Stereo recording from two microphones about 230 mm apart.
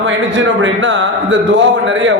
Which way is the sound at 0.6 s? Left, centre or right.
Right.